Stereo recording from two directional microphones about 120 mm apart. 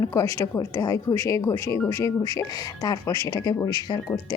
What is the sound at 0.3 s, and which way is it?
A woman's voice, 25° left (ahead or behind).